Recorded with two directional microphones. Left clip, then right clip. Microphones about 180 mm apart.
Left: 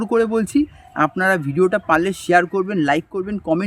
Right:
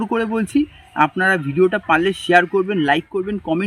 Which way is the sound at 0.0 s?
25° left (ahead or behind).